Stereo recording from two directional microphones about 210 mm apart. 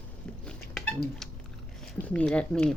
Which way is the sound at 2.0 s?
5° left (ahead or behind).